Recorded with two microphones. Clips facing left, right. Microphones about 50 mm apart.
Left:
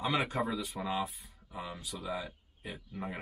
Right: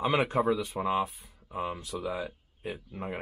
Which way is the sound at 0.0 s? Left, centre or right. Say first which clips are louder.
Right 6 dB; right.